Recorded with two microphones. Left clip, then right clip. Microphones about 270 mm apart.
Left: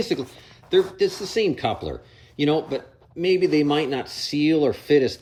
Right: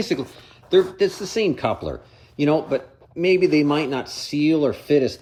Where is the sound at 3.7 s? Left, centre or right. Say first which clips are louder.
Even; centre.